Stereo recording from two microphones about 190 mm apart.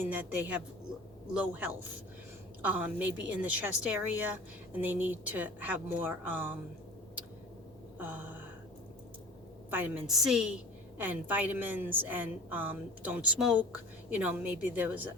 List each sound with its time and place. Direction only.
0.0 s a woman's voice: 10° right (ahead or behind)
7.9 s a woman's voice: 10° right (ahead or behind)
9.6 s a woman's voice: 10° right (ahead or behind)